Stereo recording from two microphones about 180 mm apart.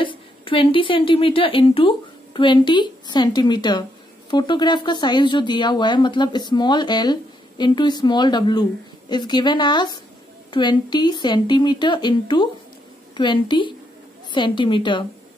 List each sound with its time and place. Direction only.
0.0 s a woman's voice: 30° left (ahead or behind)